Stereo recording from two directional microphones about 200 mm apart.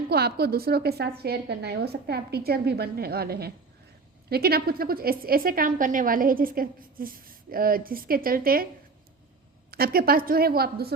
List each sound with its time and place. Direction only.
0.1 s a woman's voice: 55° right (ahead or behind)
9.7 s a woman's voice: 50° right (ahead or behind)